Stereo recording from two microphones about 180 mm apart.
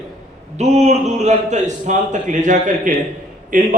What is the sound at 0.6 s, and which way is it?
A man's voice, 40° right (ahead or behind).